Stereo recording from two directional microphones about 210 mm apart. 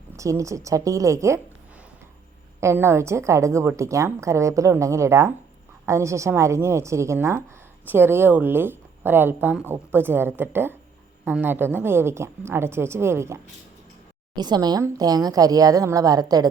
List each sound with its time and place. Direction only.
0.2 s speech: 15° right (ahead or behind)
2.6 s speech: 10° right (ahead or behind)